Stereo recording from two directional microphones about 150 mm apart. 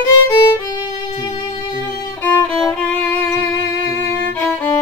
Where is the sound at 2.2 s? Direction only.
5° left (ahead or behind).